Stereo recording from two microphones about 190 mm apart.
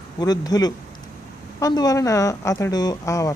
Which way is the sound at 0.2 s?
20° left (ahead or behind).